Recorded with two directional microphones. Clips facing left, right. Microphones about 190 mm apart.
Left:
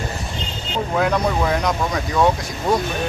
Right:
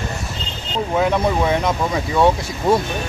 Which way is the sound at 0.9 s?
5° right (ahead or behind).